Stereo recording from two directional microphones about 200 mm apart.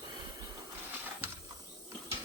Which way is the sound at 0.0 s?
20° right (ahead or behind).